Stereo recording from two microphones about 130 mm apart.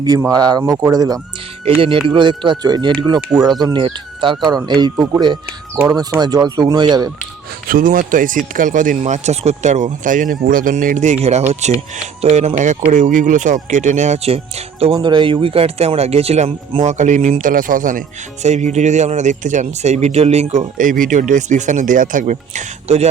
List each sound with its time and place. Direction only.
0.3 s speech: 30° right (ahead or behind)
1.7 s speech: 45° right (ahead or behind)
5.7 s speech: 15° right (ahead or behind)
6.1 s speech: 30° right (ahead or behind)
7.7 s speech: 90° right; by 12.5 s 50° right (ahead or behind)
12.9 s speech: 75° right (ahead or behind); by 14.9 s 50° right (ahead or behind)
14.9 s speech: 35° right (ahead or behind); by 18.0 s 90° right
18.4 s speech: 60° right (ahead or behind)